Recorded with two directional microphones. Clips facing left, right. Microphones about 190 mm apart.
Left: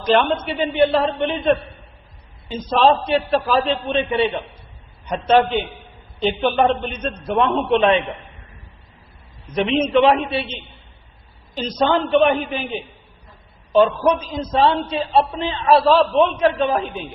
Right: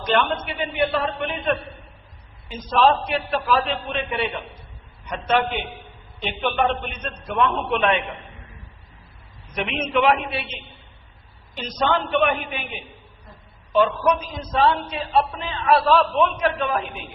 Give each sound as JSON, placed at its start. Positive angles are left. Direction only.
{"t": 0.0, "sound": "a man's voice", "side_deg": 35}
{"t": 9.6, "sound": "a man's voice", "side_deg": 30}
{"t": 13.7, "sound": "a man's voice", "side_deg": 30}